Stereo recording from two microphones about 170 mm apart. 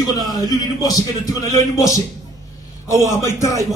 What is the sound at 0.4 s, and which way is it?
A man's voice, 20° left (ahead or behind).